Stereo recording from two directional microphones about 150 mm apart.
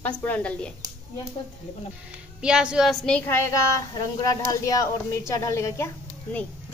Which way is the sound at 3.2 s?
15° left (ahead or behind).